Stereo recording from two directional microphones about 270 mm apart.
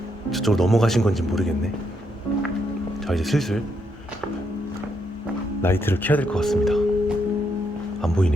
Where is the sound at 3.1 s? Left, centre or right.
Centre.